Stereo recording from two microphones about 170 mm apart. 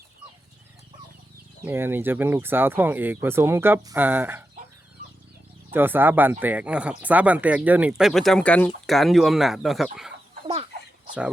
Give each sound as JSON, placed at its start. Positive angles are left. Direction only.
{"t": 1.6, "sound": "speech", "side_deg": -15}
{"t": 5.7, "sound": "speech", "side_deg": -10}
{"t": 10.4, "sound": "chicken", "side_deg": -30}